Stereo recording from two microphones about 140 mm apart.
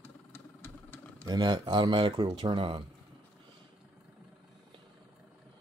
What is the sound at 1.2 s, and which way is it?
Speech, 30° right (ahead or behind).